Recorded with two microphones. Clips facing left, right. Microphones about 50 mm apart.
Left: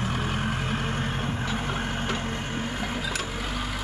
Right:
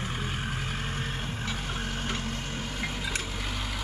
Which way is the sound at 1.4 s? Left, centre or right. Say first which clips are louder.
Left 5 dB; left.